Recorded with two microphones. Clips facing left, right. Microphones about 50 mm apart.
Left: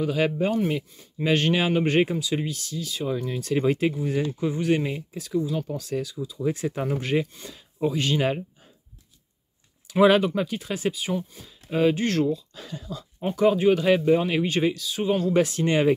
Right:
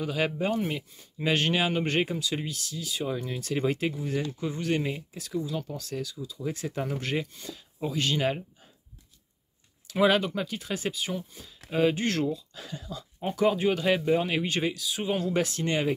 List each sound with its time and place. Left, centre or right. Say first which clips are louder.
0.0 s speech: left 5 dB; centre
9.8 s speech: left 5 dB; centre
15.3 s speech: left 6 dB; centre